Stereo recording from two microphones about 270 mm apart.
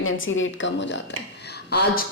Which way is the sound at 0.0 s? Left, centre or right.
Left.